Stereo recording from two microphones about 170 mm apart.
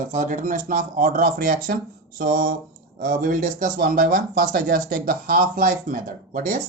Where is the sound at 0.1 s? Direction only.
45° right (ahead or behind).